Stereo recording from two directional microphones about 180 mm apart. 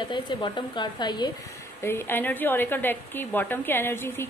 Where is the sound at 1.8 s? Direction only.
15° left (ahead or behind).